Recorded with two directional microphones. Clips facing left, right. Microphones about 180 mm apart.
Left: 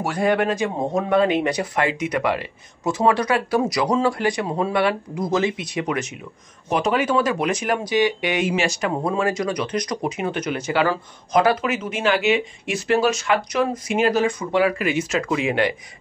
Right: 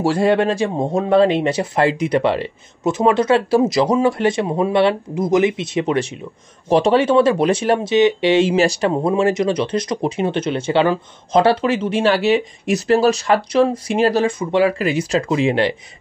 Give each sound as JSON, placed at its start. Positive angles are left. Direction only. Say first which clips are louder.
{"t": 0.0, "sound": "speech", "louder": "right 5 dB", "side_deg": -30}